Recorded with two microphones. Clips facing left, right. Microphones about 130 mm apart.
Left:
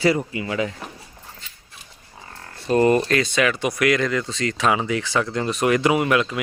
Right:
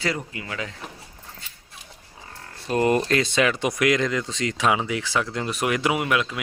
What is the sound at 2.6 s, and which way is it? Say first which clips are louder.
Speech: left 4 dB; 10° right (ahead or behind).